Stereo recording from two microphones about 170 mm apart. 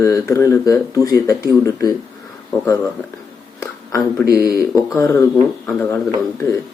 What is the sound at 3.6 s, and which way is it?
Whispering, 15° left (ahead or behind).